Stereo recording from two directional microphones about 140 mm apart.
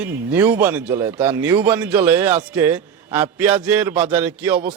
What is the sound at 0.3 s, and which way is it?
Speech, 15° right (ahead or behind).